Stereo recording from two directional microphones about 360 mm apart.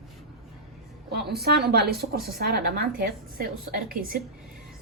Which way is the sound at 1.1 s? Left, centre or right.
Right.